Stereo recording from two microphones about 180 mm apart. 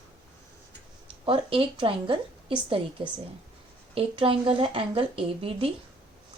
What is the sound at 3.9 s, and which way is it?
A woman's voice, 30° right (ahead or behind).